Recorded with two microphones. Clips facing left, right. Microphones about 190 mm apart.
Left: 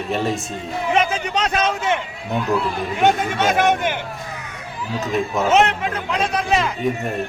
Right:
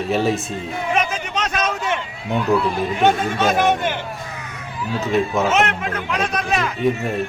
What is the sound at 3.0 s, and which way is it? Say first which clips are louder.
Speech: even; 20° left (ahead or behind).